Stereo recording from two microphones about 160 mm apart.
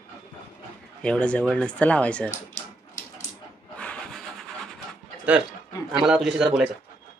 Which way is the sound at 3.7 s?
10° left (ahead or behind).